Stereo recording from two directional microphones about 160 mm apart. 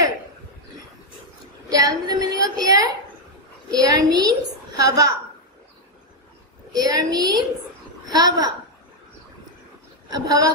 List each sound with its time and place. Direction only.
1.7 s a woman's voice: 20° right (ahead or behind)
6.7 s a woman's voice: 25° right (ahead or behind)
10.0 s speech: 25° right (ahead or behind)